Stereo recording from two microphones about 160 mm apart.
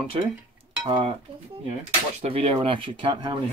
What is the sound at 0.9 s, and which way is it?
Dishes, 35° right (ahead or behind).